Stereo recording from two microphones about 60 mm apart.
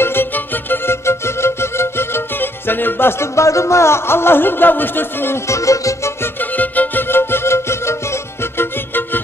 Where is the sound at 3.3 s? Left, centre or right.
Left.